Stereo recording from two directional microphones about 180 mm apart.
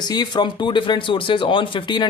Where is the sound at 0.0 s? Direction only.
25° left (ahead or behind).